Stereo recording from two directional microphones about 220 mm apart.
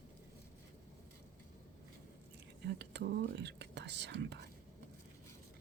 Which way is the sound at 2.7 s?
50° right (ahead or behind).